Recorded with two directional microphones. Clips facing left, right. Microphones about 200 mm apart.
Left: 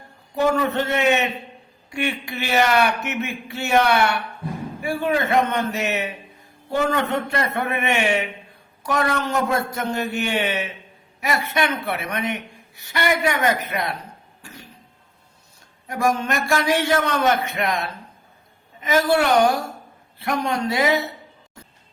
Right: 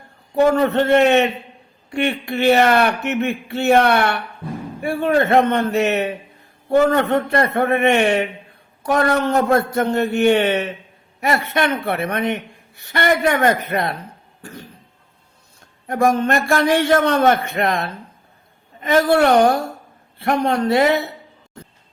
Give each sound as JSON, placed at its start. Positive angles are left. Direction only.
{"t": 0.3, "sound": "a woman's voice", "side_deg": -55}
{"t": 14.4, "sound": "cough", "side_deg": -55}
{"t": 15.9, "sound": "a woman's voice", "side_deg": -55}